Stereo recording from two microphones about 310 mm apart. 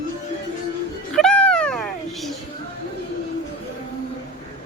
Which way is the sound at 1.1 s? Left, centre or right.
Centre.